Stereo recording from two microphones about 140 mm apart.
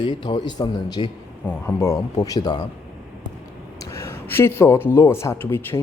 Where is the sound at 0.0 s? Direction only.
30° left (ahead or behind).